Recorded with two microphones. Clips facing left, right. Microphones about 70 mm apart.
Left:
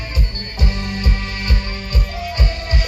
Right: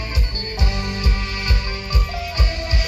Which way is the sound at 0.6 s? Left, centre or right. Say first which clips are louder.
Left 2 dB; left.